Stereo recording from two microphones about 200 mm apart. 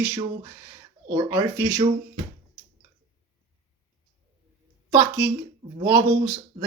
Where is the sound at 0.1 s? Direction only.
15° right (ahead or behind).